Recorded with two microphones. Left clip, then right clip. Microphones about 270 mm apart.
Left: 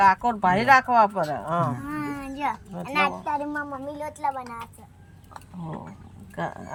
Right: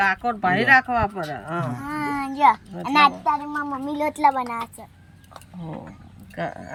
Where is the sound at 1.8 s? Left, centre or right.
Centre.